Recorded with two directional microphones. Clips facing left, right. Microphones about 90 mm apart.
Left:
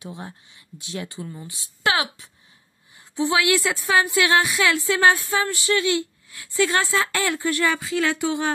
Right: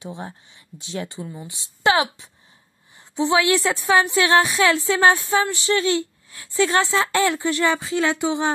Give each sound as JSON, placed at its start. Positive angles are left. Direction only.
{"t": 0.0, "sound": "a woman's voice", "side_deg": -25}